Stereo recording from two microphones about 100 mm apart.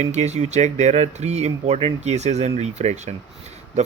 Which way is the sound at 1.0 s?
90° right.